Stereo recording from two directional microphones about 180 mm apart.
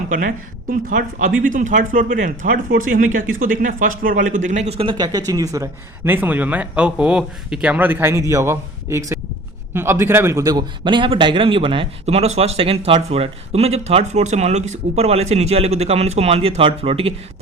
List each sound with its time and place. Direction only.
0.1 s speech: 50° right (ahead or behind)
4.4 s a man's voice: 35° right (ahead or behind)